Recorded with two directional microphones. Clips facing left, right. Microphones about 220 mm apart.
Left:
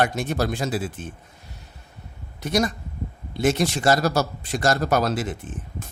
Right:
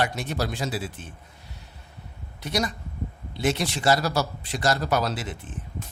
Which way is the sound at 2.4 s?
45° left (ahead or behind).